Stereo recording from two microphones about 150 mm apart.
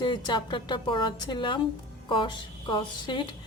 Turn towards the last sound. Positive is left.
turn(degrees=30)  # may be behind; listen again after turning